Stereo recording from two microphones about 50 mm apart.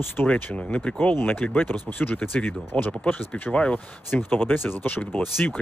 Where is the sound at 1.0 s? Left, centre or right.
Left.